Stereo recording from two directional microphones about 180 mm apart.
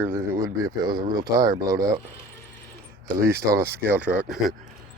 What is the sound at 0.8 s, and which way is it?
Speech, 25° right (ahead or behind).